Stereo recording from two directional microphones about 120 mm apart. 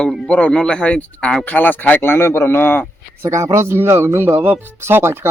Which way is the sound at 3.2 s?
25° right (ahead or behind).